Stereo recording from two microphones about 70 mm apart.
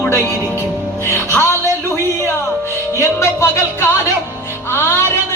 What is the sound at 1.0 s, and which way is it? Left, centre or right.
Speech, left.